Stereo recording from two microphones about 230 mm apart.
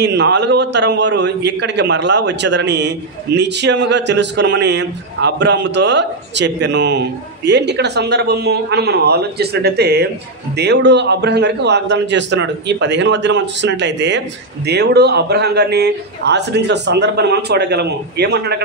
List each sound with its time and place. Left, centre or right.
0.0 s a man's voice: right